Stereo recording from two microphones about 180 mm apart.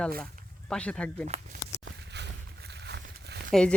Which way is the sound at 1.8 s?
70° right (ahead or behind).